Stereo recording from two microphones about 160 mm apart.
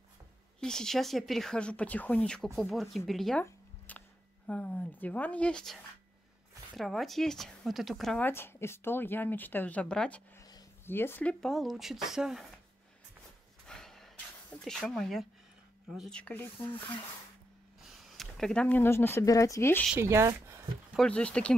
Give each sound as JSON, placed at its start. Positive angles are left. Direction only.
{"t": 0.6, "sound": "speech", "side_deg": 5}
{"t": 3.4, "sound": "zipper", "side_deg": 10}
{"t": 4.5, "sound": "speech", "side_deg": 10}
{"t": 8.3, "sound": "speech", "side_deg": 15}
{"t": 13.7, "sound": "a sound", "side_deg": 5}
{"t": 14.6, "sound": "speech", "side_deg": 5}
{"t": 16.5, "sound": "speech", "side_deg": 30}
{"t": 17.8, "sound": "speech", "side_deg": 0}
{"t": 20.0, "sound": "speech", "side_deg": -15}
{"t": 20.9, "sound": "speech", "side_deg": 5}